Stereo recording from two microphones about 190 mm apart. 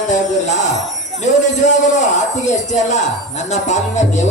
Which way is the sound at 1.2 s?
40° left (ahead or behind).